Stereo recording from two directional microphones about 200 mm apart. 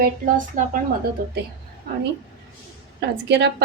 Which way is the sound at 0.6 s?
40° right (ahead or behind).